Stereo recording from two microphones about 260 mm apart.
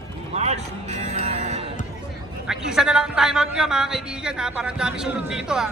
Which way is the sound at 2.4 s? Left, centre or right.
Centre.